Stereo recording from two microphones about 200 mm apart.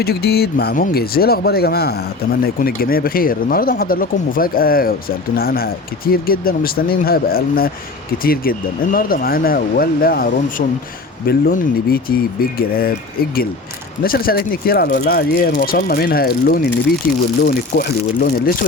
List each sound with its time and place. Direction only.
0.0 s speech: 50° left (ahead or behind)
14.0 s speech: 45° left (ahead or behind)